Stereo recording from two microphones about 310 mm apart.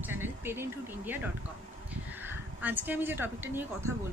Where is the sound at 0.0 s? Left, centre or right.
Centre.